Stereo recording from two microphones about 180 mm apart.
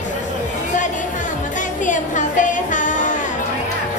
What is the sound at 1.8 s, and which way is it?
Music, 45° left (ahead or behind).